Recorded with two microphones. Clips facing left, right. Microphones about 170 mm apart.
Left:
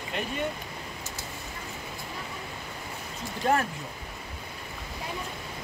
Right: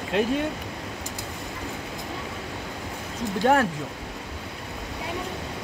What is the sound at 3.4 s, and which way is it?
Speech, 90° right.